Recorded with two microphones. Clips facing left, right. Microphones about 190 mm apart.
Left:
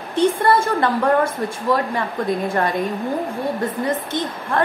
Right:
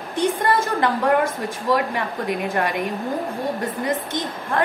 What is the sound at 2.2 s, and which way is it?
Speech, 15° right (ahead or behind).